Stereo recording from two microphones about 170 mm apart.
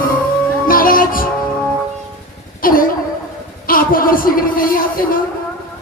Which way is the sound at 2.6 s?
55° left (ahead or behind).